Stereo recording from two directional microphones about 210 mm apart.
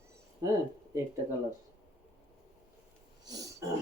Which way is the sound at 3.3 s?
15° right (ahead or behind).